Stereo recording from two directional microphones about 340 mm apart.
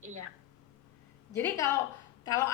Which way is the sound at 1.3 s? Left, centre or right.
Centre.